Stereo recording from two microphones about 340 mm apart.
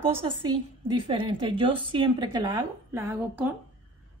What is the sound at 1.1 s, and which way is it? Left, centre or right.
Speech, centre.